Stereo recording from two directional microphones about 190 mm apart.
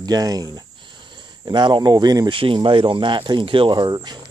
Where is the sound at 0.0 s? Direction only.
20° right (ahead or behind).